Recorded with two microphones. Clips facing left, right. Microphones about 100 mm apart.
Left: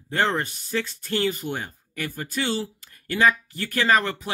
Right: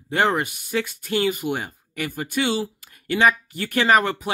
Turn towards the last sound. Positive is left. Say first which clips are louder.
# right 3 dB
turn(degrees=-20)  # may be behind; listen again after turning